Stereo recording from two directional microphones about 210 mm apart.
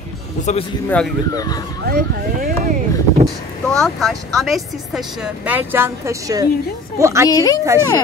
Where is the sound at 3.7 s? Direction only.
Centre (ahead or behind).